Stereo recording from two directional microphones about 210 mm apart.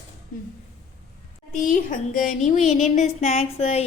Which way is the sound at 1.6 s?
40° left (ahead or behind).